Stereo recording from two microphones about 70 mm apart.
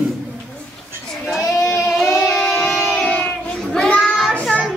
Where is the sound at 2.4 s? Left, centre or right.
Left.